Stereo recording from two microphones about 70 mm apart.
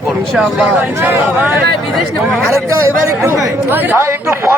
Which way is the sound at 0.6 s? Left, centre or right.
Right.